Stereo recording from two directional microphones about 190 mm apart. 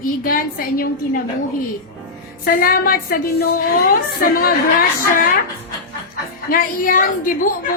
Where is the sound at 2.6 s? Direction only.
50° left (ahead or behind).